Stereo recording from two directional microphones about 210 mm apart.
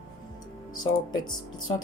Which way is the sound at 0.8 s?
20° left (ahead or behind).